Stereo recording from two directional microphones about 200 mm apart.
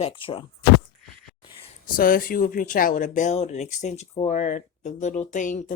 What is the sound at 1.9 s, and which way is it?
Speech, 45° left (ahead or behind).